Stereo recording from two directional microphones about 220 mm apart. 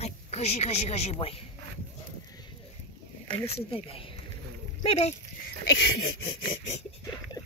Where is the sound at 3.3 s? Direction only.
25° left (ahead or behind).